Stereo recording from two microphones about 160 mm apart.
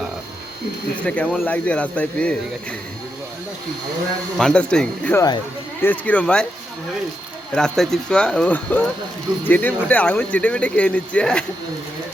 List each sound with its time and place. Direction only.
1.0 s speech: 5° left (ahead or behind)
4.4 s speech: 5° left (ahead or behind)
5.1 s speech: 25° left (ahead or behind)
5.8 s speech: 10° left (ahead or behind)
7.5 s speech: 5° left (ahead or behind)